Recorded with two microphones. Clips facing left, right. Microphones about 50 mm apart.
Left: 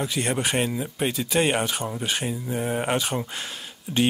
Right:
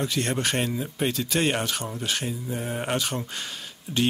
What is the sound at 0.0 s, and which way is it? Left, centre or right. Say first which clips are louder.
Speech: left 1 dB; centre.